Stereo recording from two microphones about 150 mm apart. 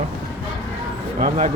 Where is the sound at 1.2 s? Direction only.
60° right (ahead or behind).